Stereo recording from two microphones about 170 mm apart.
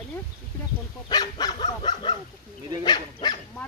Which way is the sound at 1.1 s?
25° left (ahead or behind).